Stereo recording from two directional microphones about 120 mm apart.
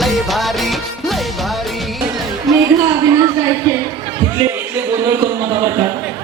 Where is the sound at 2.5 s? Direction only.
Centre (ahead or behind).